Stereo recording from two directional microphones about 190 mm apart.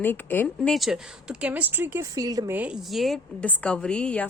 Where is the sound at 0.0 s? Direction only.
10° left (ahead or behind).